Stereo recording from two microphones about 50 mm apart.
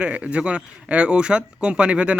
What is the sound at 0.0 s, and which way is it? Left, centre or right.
Speech, right.